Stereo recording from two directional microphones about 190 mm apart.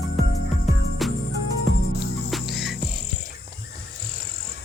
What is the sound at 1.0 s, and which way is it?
Music, centre (ahead or behind).